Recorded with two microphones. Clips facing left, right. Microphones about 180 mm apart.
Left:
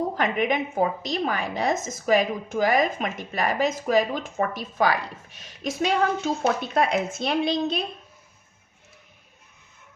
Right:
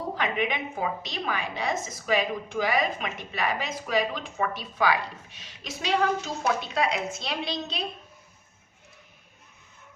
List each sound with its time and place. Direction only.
0.2 s a woman's voice: 45° left (ahead or behind)